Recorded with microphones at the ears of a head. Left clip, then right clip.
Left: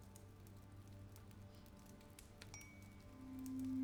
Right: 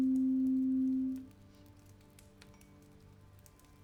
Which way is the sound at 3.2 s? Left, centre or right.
Left.